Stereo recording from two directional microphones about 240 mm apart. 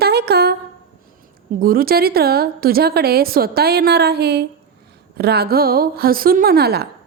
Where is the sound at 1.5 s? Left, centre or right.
Right.